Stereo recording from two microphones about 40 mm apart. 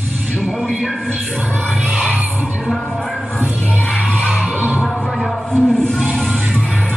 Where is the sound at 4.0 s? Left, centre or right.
Left.